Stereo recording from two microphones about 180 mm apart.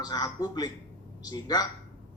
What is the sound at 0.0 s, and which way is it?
A man's voice, 20° left (ahead or behind).